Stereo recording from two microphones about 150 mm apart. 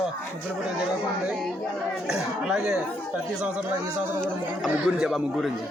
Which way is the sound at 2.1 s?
5° right (ahead or behind).